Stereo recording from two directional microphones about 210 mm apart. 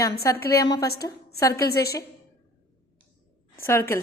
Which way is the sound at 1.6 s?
50° left (ahead or behind).